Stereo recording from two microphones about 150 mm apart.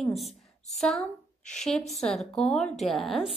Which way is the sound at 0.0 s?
Centre (ahead or behind).